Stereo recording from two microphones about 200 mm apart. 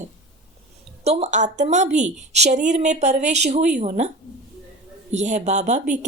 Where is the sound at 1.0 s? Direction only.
35° right (ahead or behind).